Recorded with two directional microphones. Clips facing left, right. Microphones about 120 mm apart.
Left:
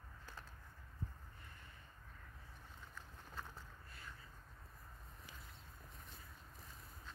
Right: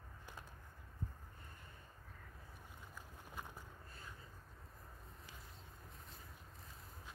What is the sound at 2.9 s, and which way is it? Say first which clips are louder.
Boat: right 1 dB; 15° right (ahead or behind).